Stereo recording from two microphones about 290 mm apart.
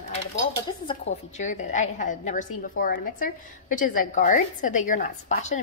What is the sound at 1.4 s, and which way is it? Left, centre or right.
A woman's voice, left.